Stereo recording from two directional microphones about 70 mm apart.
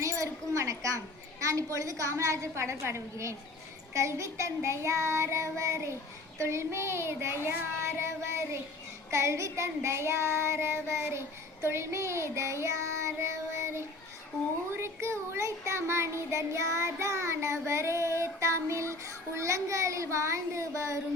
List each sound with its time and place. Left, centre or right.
0.0 s a sound: right
1.4 s speech: right
6.4 s child singing: right
11.6 s speech: right
13.3 s child singing: right
14.8 s speech: right